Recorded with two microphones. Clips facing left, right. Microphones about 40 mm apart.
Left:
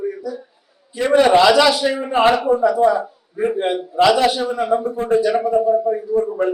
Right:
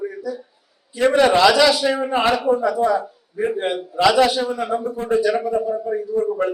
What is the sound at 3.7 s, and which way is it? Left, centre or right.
A man's voice, centre.